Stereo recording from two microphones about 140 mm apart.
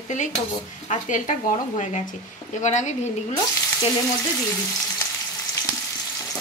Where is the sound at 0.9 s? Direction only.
60° left (ahead or behind).